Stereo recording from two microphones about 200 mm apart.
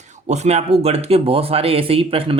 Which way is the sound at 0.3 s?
35° right (ahead or behind).